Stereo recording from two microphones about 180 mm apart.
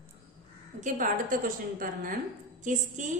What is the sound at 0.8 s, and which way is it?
A woman's voice, 45° right (ahead or behind).